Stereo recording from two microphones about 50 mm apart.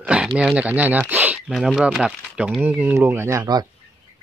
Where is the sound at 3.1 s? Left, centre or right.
Right.